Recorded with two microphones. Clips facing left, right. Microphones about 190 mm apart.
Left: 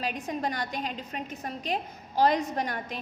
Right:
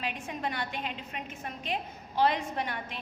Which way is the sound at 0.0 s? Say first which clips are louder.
Left 4 dB; 40° left (ahead or behind).